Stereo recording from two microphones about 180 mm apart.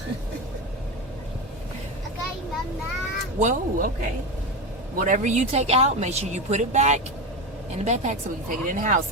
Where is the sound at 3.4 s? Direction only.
40° right (ahead or behind).